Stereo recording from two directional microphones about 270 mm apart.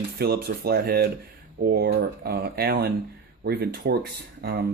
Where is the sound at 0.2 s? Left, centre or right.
Right.